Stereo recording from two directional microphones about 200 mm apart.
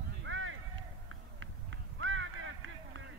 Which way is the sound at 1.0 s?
80° right.